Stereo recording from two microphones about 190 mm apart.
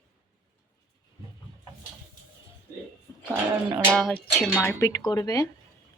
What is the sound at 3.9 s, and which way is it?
Speech, 5° left (ahead or behind).